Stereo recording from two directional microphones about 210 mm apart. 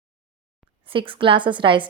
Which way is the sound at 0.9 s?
25° right (ahead or behind).